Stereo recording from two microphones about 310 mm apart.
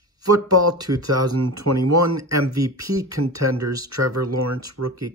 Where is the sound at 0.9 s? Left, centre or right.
Right.